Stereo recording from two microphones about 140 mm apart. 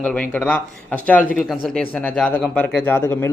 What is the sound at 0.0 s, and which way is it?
A man's voice, 10° left (ahead or behind).